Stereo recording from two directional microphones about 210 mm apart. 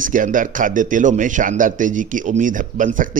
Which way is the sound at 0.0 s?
40° right (ahead or behind).